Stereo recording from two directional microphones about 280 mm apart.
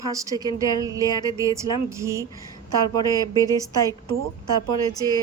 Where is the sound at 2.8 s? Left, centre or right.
Centre.